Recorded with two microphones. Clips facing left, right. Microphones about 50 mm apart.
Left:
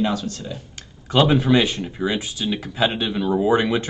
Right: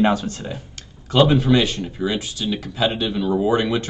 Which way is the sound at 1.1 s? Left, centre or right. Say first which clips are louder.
Right 1 dB; centre.